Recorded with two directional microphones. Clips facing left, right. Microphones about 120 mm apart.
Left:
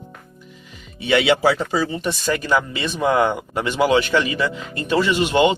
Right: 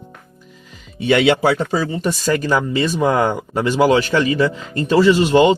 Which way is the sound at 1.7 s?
40° right (ahead or behind).